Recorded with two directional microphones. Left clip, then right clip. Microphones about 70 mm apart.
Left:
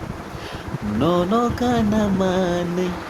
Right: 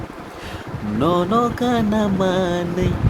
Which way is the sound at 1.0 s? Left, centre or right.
Right.